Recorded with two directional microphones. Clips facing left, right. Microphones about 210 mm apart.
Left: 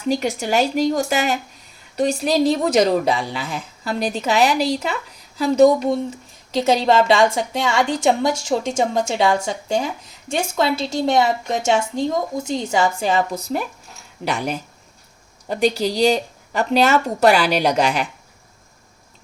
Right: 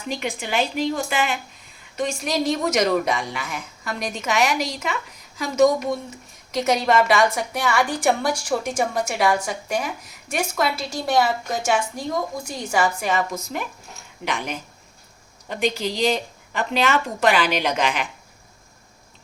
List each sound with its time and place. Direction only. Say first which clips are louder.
0.0 s a woman's voice: left 7 dB; 40° left (ahead or behind)